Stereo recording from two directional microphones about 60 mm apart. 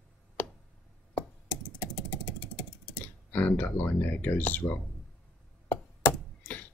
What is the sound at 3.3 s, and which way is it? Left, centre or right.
Speech, left.